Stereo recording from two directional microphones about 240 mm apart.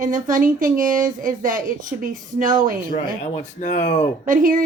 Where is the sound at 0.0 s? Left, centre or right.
Right.